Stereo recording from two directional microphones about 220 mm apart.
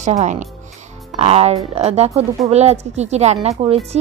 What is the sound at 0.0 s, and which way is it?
Speech, 30° right (ahead or behind).